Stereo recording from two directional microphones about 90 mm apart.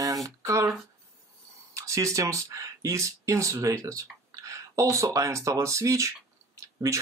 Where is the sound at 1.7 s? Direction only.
35° right (ahead or behind).